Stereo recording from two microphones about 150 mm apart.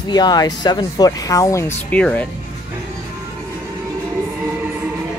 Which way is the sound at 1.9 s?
10° left (ahead or behind).